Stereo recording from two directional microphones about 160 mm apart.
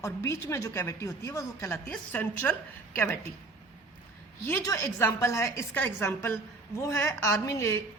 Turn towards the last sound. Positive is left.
turn(degrees=15)  # may be behind; listen again after turning